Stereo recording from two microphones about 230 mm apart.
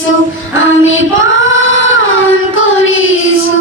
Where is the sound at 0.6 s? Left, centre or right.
Left.